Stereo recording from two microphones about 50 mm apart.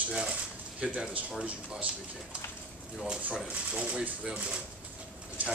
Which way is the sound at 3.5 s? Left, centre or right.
Right.